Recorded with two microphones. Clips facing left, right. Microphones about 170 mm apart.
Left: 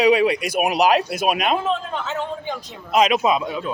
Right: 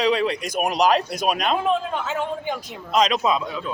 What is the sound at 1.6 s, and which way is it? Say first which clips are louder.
A man's voice: right 1 dB; 10° right (ahead or behind).